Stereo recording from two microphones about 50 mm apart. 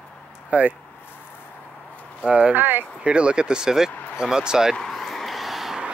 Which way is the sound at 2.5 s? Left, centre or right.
Right.